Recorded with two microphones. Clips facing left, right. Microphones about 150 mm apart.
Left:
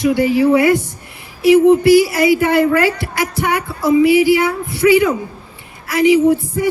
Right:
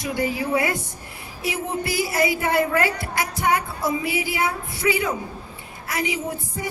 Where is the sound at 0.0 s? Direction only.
75° left (ahead or behind).